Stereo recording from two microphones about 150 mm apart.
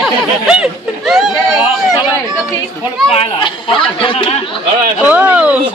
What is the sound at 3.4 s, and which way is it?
Speech, 35° left (ahead or behind).